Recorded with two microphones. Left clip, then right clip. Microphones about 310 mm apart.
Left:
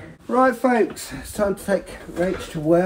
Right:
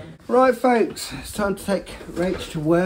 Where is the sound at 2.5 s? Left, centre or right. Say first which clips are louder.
Left 2 dB; centre.